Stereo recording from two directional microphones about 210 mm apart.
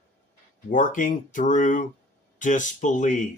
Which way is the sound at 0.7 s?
40° left (ahead or behind).